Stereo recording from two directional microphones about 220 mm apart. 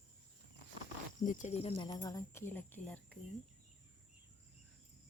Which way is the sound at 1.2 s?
35° left (ahead or behind).